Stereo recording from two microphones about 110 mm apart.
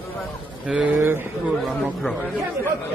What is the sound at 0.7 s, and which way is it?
Speech, 10° right (ahead or behind).